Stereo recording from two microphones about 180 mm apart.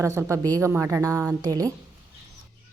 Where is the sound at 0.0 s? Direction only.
15° right (ahead or behind).